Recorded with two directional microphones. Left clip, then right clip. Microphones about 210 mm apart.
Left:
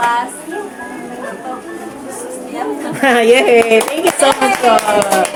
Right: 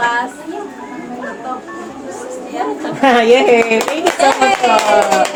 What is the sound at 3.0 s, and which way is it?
Speech, 35° left (ahead or behind).